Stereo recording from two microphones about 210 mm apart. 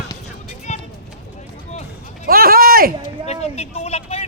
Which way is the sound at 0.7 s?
35° left (ahead or behind).